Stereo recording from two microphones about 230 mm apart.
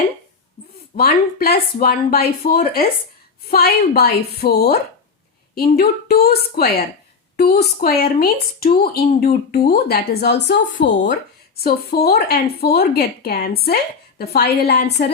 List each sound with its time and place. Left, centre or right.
0.9 s speech: left
6.1 s speech: left
10.8 s speech: left